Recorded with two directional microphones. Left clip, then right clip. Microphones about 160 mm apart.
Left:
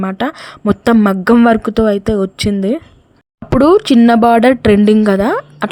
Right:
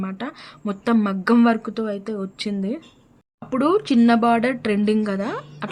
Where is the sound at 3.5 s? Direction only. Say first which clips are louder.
Left 10 dB; 45° left (ahead or behind).